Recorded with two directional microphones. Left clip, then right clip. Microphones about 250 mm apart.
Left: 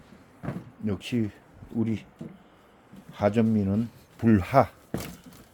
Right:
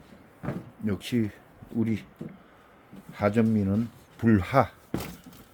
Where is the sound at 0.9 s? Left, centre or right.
Centre.